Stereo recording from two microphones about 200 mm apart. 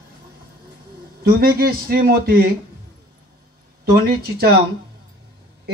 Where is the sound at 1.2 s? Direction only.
50° right (ahead or behind).